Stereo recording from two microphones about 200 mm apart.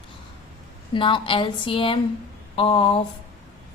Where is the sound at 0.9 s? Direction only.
25° left (ahead or behind).